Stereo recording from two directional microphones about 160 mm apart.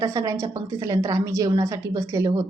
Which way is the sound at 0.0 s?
20° right (ahead or behind).